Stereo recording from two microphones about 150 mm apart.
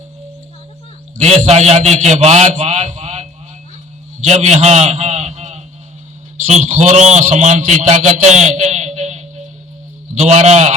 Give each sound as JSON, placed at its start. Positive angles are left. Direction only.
{"t": 1.2, "sound": "a man's voice", "side_deg": -50}
{"t": 4.2, "sound": "a sound", "side_deg": -50}
{"t": 6.4, "sound": "a man's voice", "side_deg": -50}